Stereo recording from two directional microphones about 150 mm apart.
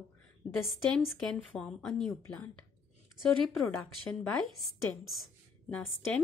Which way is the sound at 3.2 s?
5° left (ahead or behind).